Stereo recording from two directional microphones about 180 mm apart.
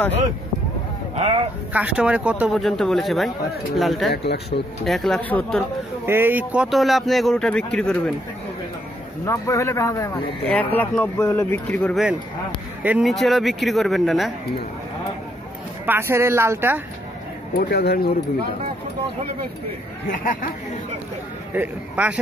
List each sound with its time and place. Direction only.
1.1 s speech: 35° right (ahead or behind)
1.7 s speech: 5° right (ahead or behind)
4.1 s speech: 65° left (ahead or behind)
4.8 s speech: centre (ahead or behind)
6.0 s speech: 10° right (ahead or behind); by 8.1 s 5° left (ahead or behind)
9.2 s speech: 15° left (ahead or behind); by 14.3 s centre (ahead or behind)
15.8 s speech: 10° right (ahead or behind)
17.6 s speech: 60° left (ahead or behind)
20.1 s speech: 50° left (ahead or behind)
21.5 s speech: 5° right (ahead or behind)